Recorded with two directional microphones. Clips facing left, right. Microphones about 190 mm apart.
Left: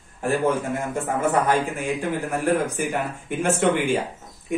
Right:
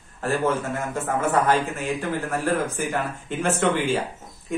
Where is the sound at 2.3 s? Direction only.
15° left (ahead or behind).